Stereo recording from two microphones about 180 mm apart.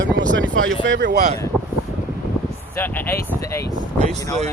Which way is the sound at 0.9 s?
70° right (ahead or behind).